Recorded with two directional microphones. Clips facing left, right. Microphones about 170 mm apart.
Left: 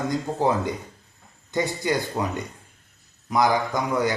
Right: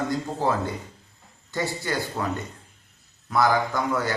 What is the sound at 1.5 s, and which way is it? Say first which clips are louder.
Speech: left 4 dB; 20° left (ahead or behind).